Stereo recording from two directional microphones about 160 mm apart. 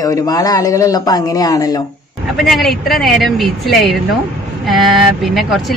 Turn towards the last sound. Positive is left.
turn(degrees=0)  # may be behind; listen again after turning